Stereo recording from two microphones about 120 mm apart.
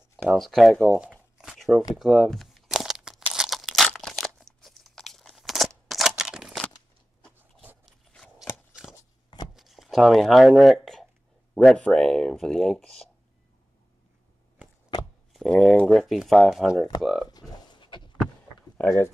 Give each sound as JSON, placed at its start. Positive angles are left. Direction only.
{"t": 0.3, "sound": "speech", "side_deg": 0}
{"t": 2.0, "sound": "a sound", "side_deg": -5}
{"t": 3.3, "sound": "crumpling", "side_deg": 0}
{"t": 7.8, "sound": "crunch", "side_deg": 5}
{"t": 8.4, "sound": "crunch", "side_deg": -5}
{"t": 9.5, "sound": "a sound", "side_deg": 0}
{"t": 11.5, "sound": "speech", "side_deg": 10}
{"t": 15.3, "sound": "speech", "side_deg": 0}
{"t": 17.3, "sound": "pig", "side_deg": 35}
{"t": 18.8, "sound": "speech", "side_deg": 15}